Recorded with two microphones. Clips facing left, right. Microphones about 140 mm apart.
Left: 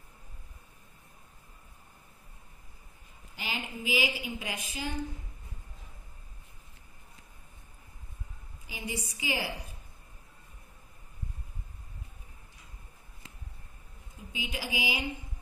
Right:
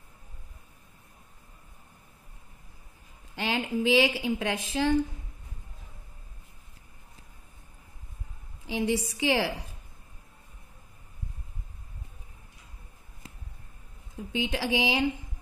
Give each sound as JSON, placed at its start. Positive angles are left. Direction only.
{"t": 3.3, "sound": "a woman's voice", "side_deg": -75}
{"t": 8.6, "sound": "a woman's voice", "side_deg": -85}
{"t": 14.5, "sound": "speech", "side_deg": -90}